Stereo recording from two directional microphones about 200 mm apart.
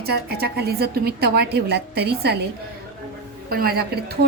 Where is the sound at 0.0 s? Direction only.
50° right (ahead or behind).